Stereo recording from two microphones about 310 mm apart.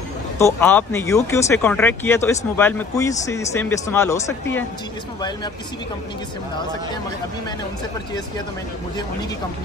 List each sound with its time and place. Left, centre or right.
0.6 s speech: centre